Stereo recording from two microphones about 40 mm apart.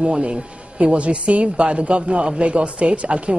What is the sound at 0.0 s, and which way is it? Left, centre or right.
Speech, right.